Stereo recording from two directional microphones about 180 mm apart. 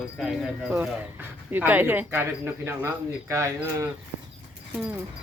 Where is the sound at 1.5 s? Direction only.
10° right (ahead or behind).